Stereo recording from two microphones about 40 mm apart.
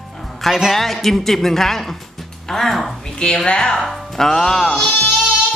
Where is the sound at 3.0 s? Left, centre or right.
Left.